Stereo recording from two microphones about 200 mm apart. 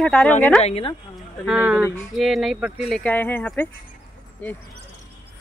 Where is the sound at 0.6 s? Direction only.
30° left (ahead or behind).